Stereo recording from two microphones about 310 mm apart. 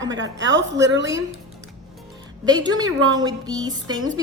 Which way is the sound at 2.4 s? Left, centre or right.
Centre.